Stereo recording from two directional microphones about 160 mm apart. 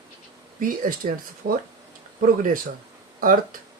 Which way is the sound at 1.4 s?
75° right (ahead or behind).